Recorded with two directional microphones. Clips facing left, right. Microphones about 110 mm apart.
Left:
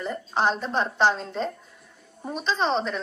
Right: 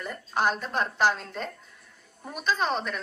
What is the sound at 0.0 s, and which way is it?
A woman's voice, 25° left (ahead or behind).